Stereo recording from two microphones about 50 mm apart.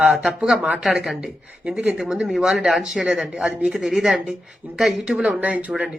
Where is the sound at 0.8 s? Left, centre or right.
Centre; by 5.7 s right.